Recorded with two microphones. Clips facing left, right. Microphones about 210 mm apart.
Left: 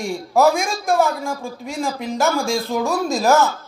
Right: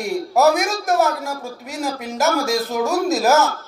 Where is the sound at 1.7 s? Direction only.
5° right (ahead or behind).